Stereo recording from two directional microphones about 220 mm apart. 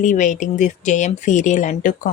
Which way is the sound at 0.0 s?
35° left (ahead or behind).